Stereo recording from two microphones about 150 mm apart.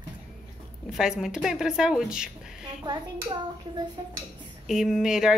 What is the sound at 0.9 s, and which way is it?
Speech, 5° right (ahead or behind).